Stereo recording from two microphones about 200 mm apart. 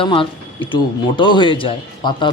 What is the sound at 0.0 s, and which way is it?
A man's voice, 25° left (ahead or behind).